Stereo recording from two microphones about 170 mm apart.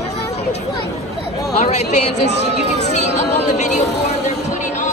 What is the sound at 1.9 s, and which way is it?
Speech, 40° left (ahead or behind).